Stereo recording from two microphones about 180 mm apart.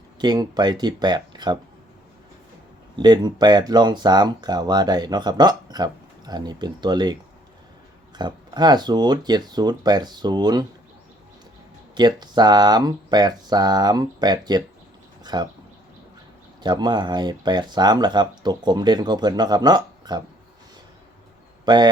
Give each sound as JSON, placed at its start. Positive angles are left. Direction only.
{"t": 0.2, "sound": "speech", "side_deg": -25}
{"t": 2.9, "sound": "speech", "side_deg": -25}
{"t": 11.9, "sound": "speech", "side_deg": -25}
{"t": 16.6, "sound": "speech", "side_deg": -25}
{"t": 21.6, "sound": "speech", "side_deg": -25}